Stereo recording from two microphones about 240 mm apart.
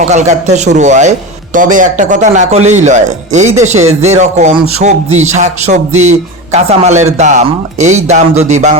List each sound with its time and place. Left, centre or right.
0.0 s speech: right